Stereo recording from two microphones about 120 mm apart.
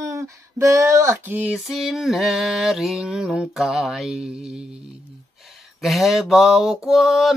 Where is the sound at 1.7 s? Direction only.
Centre (ahead or behind).